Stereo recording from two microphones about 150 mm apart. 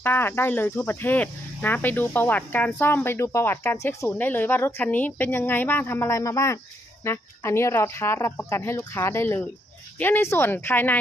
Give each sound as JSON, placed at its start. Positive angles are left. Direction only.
{"t": 0.0, "sound": "speech", "side_deg": 15}